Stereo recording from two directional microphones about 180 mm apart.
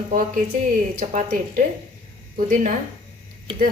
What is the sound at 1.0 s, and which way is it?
Speech, 45° right (ahead or behind).